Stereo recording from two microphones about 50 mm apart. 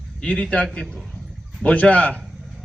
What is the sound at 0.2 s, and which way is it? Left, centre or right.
Speech, centre.